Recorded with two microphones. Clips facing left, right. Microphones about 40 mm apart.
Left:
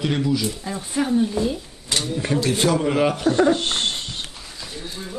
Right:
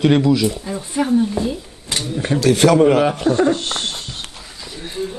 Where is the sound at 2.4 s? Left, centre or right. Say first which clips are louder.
Right 9 dB; right.